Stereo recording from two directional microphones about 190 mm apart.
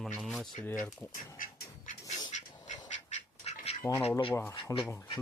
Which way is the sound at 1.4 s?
45° left (ahead or behind).